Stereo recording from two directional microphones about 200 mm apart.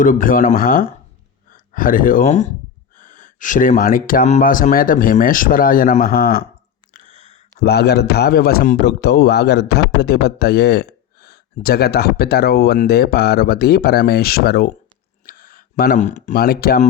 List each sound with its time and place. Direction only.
0.0 s speech: 40° left (ahead or behind)
7.6 s speech: 55° left (ahead or behind)
15.3 s a sound: 45° left (ahead or behind)
16.3 s speech: 50° left (ahead or behind)